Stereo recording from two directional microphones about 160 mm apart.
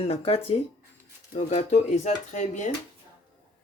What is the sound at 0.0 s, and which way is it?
Speech, 40° left (ahead or behind).